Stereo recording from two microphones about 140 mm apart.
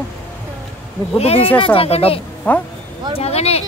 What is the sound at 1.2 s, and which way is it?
Speech, 45° left (ahead or behind).